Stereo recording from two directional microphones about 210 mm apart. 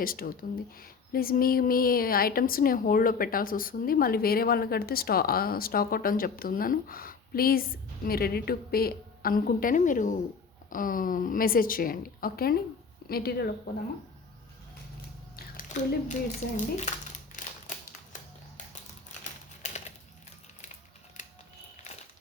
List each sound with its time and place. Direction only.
0.0 s speech: 45° left (ahead or behind)
15.4 s a sound: 45° left (ahead or behind)
16.6 s speech: 35° left (ahead or behind)
18.1 s music: 35° left (ahead or behind)
19.2 s typing: 30° left (ahead or behind)
21.2 s a sound: 35° left (ahead or behind)